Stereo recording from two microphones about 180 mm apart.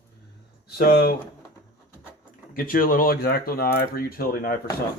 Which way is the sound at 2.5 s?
50° left (ahead or behind).